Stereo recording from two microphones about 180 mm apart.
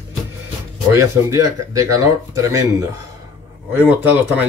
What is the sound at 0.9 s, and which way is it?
Speech, 15° right (ahead or behind).